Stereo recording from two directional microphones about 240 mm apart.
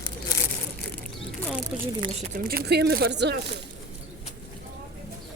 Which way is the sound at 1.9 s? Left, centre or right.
Right.